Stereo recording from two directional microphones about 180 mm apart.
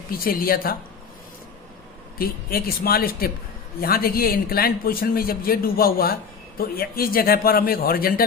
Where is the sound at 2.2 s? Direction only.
55° left (ahead or behind).